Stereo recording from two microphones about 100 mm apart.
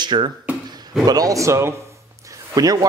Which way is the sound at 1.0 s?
40° right (ahead or behind).